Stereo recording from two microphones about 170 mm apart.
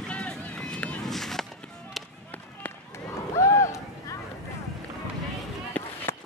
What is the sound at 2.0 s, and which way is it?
Music, centre (ahead or behind).